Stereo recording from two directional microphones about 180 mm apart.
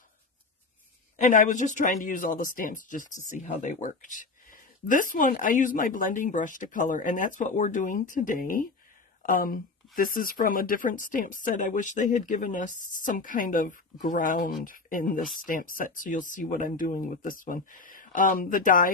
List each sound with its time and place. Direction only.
1.1 s speech: 45° left (ahead or behind)